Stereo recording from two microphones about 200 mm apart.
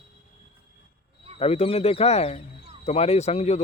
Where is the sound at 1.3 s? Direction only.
30° left (ahead or behind).